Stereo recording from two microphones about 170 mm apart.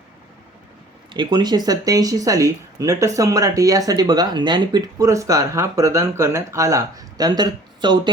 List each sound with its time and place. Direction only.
1.1 s speech: 25° right (ahead or behind)